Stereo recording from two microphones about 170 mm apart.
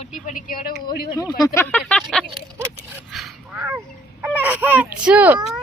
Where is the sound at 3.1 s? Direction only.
Centre (ahead or behind).